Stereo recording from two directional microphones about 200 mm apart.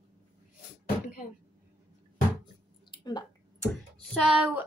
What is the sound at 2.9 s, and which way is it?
Speech, 20° left (ahead or behind).